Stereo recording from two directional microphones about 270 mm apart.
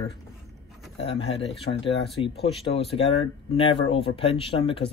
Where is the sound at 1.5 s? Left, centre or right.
Left.